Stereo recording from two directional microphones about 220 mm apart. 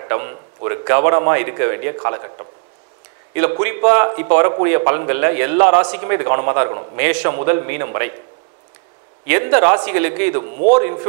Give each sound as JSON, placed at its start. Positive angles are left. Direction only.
{"t": 0.0, "sound": "a man's voice", "side_deg": -20}
{"t": 3.6, "sound": "a man's voice", "side_deg": -15}
{"t": 9.2, "sound": "a man's voice", "side_deg": -15}
{"t": 10.5, "sound": "a man's voice", "side_deg": -40}